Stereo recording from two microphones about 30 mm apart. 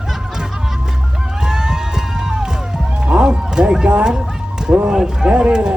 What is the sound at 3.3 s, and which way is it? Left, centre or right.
Music, right.